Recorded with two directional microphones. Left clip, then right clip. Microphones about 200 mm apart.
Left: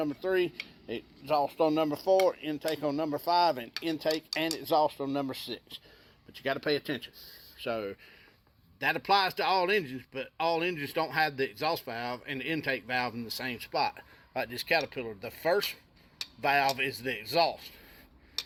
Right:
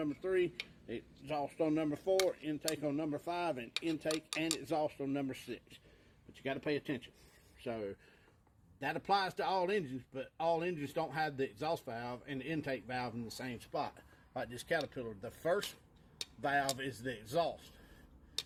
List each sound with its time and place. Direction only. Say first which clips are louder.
0.0 s a man's voice: left 6 dB; centre (ahead or behind); by 17.3 s 25° left (ahead or behind)